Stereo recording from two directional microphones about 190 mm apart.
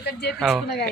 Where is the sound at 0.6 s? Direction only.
60° left (ahead or behind).